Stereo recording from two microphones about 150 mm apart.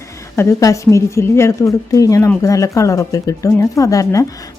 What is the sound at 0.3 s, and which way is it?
Speech, 20° left (ahead or behind).